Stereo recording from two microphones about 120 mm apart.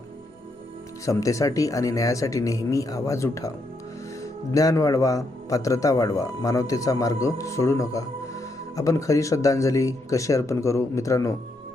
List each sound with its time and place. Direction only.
1.0 s a man's voice: 25° left (ahead or behind)
4.5 s a man's voice: 30° left (ahead or behind)